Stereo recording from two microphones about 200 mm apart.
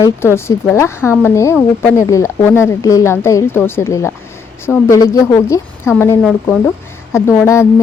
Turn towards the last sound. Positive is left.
turn(degrees=15)  # may be behind; listen again after turning